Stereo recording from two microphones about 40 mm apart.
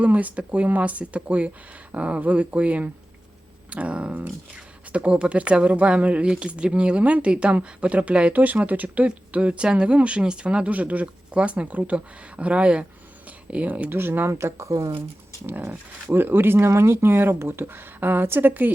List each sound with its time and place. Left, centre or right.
0.0 s speech: right
3.7 s a sound: right
4.5 s speech: right
8.3 s speech: right
9.0 s speech: right
13.9 s speech: right
16.1 s speech: right